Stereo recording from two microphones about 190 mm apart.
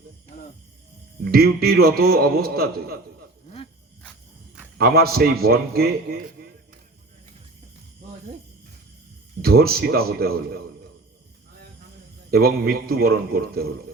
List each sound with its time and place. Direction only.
1.2 s a man's voice: 55° right (ahead or behind)
4.8 s a man's voice: 55° right (ahead or behind)
6.4 s music: 50° right (ahead or behind)
9.4 s a man's voice: 55° right (ahead or behind)
12.3 s a man's voice: 55° right (ahead or behind)